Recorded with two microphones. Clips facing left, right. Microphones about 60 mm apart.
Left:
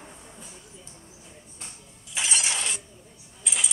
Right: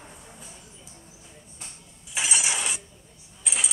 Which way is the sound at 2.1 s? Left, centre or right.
Centre.